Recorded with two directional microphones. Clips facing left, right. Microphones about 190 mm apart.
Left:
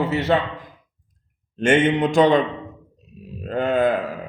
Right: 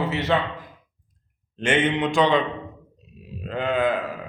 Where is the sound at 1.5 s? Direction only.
45° left (ahead or behind).